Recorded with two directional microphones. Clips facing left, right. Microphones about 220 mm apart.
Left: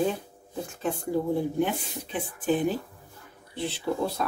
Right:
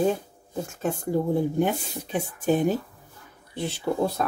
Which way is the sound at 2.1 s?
45° right (ahead or behind).